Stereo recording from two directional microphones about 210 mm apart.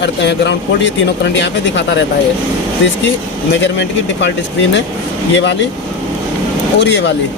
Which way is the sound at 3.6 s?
55° left (ahead or behind).